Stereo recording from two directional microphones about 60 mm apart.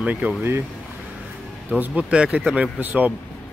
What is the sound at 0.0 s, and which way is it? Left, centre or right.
Speech, right.